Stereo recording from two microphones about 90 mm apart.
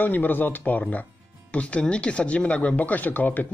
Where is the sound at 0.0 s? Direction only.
20° left (ahead or behind).